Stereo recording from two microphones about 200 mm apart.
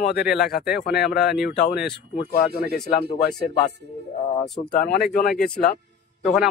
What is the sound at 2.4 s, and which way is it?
Speech, 50° left (ahead or behind).